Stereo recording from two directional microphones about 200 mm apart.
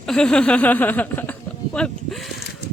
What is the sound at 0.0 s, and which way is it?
Speech, 5° left (ahead or behind).